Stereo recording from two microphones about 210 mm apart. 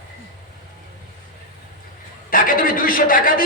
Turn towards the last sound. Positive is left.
turn(degrees=40)  # may be behind; listen again after turning